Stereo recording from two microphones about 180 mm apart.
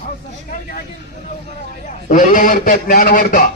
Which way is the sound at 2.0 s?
45° left (ahead or behind).